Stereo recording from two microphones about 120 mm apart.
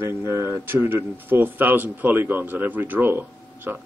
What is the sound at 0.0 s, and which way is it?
A man's voice, 25° right (ahead or behind).